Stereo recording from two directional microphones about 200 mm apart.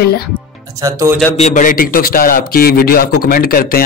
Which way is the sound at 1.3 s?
35° left (ahead or behind).